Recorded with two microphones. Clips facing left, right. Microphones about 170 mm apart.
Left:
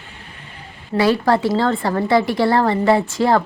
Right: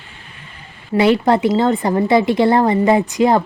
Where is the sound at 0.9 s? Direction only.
20° right (ahead or behind).